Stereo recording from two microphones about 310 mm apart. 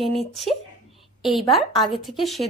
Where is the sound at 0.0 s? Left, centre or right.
Centre.